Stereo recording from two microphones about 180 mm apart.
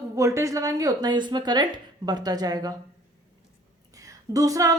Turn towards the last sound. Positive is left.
turn(degrees=-20)  # may be behind; listen again after turning